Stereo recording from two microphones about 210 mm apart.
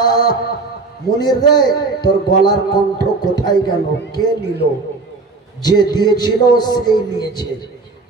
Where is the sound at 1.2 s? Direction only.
20° left (ahead or behind).